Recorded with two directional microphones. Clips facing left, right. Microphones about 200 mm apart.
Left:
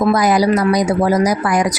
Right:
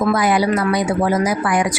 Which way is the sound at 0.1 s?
40° left (ahead or behind).